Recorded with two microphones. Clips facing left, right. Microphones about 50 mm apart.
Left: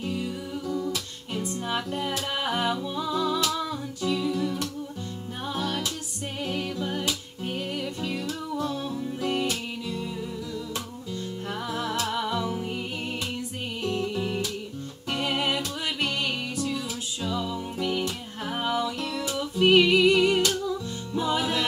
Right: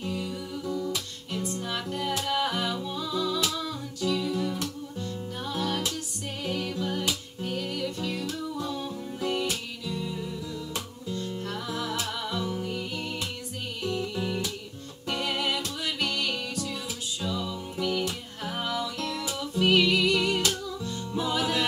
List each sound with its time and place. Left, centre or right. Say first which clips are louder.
0.0 s music: left 2 dB; centre
3.5 s humming: left 3 dB; centre
4.3 s music: left 2 dB; centre
5.7 s music: even; centre
6.4 s a capella: even; centre
7.4 s music: even; centre
8.6 s music: left 3 dB; centre
11.4 s music: left 5 dB; centre
14.1 s music: left 2 dB; centre
18.9 s music: left 1 dB; centre
19.6 s music: left 4 dB; left